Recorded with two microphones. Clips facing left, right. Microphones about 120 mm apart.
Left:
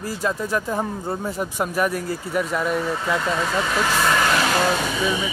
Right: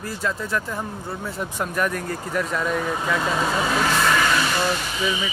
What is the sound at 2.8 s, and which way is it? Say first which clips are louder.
Speech: even; 15° right (ahead or behind).